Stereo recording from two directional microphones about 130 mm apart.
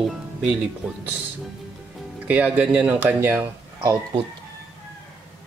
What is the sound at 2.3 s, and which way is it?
Speech, 10° right (ahead or behind).